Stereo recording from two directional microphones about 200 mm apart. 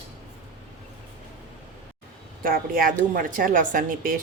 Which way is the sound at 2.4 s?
45° right (ahead or behind).